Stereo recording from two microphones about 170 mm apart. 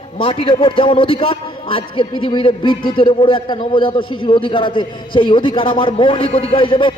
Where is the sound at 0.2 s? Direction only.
30° left (ahead or behind).